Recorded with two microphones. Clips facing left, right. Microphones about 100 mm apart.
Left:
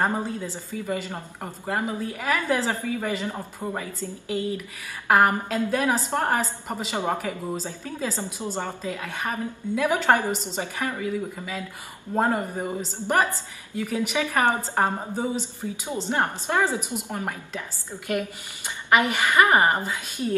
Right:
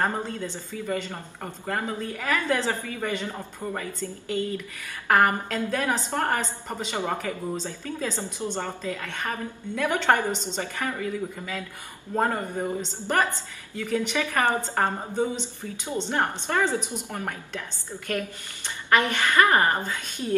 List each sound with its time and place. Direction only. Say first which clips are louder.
0.0 s speech: left 2 dB; 15° left (ahead or behind)